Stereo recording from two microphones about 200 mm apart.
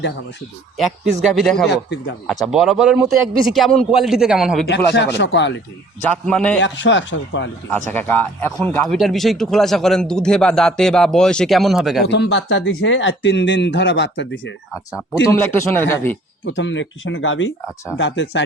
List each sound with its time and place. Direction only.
0.8 s a man's voice: centre (ahead or behind)
1.6 s speech: 55° left (ahead or behind)
2.2 s a man's voice: centre (ahead or behind)
4.9 s speech: 60° left (ahead or behind)
6.1 s speech: 5° left (ahead or behind)
6.6 s speech: 65° left (ahead or behind)
7.7 s a man's voice: 10° left (ahead or behind)
12.1 s speech: 60° left (ahead or behind)
15.2 s speech: 15° left (ahead or behind)
16.5 s speech: 70° left (ahead or behind)